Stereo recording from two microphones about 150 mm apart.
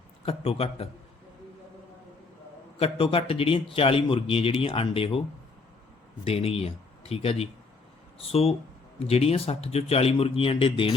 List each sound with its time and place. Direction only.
0.3 s a man's voice: 40° left (ahead or behind)
2.7 s a man's voice: 40° left (ahead or behind)
6.2 s a man's voice: 40° left (ahead or behind)